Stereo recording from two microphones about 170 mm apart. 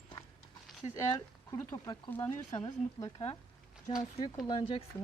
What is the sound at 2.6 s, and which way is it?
Speech, 25° left (ahead or behind).